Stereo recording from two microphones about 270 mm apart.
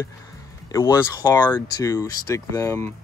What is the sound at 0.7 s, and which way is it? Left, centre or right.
Speech, centre.